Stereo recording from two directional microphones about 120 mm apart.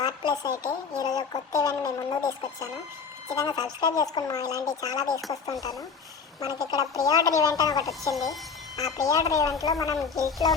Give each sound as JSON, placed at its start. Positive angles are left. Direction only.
{"t": 0.0, "sound": "speech", "side_deg": 35}
{"t": 3.3, "sound": "speech", "side_deg": 35}
{"t": 6.4, "sound": "a woman's voice", "side_deg": 30}
{"t": 8.1, "sound": "speech", "side_deg": 0}
{"t": 8.7, "sound": "a woman's voice", "side_deg": 30}